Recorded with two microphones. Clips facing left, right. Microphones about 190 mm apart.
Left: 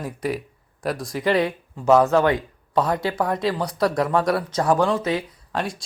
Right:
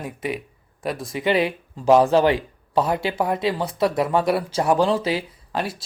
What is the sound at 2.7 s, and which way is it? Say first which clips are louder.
Speech: even; 10° right (ahead or behind).